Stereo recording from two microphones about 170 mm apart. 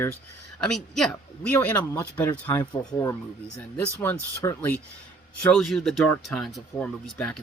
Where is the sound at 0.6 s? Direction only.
Centre (ahead or behind).